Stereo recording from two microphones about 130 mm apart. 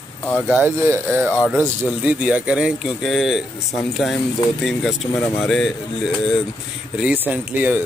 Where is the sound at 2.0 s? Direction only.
10° right (ahead or behind).